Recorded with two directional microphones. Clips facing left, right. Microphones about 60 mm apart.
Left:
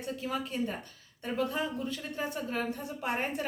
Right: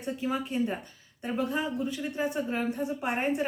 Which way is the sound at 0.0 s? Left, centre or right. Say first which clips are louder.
Right 4 dB; right.